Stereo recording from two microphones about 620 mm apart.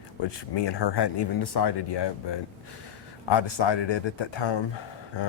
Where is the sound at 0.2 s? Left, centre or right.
Left.